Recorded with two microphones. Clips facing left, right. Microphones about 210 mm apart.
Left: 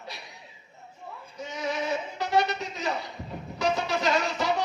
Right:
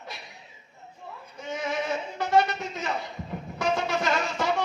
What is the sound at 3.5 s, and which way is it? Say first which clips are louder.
Music: even; 50° right (ahead or behind).